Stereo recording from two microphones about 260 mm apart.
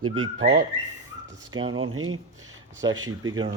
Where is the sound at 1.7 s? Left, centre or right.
Right.